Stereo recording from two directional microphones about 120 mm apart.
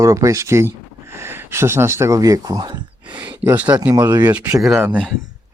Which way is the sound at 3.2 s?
15° right (ahead or behind).